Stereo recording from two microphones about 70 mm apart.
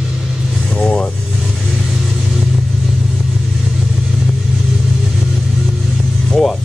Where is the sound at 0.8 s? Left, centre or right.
Centre.